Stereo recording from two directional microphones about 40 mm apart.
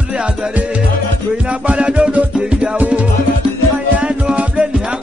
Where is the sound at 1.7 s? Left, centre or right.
Right.